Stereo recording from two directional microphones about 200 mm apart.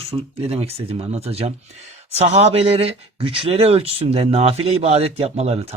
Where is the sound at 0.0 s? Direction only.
30° right (ahead or behind).